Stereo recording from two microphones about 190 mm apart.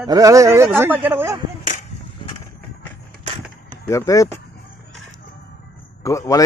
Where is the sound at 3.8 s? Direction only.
15° left (ahead or behind).